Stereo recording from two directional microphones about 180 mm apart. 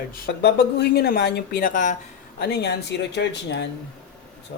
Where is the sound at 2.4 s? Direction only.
65° left (ahead or behind).